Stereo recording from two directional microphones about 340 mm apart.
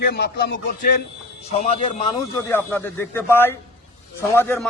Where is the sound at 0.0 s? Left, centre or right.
Left.